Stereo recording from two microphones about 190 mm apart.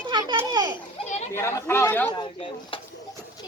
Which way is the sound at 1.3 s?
15° left (ahead or behind).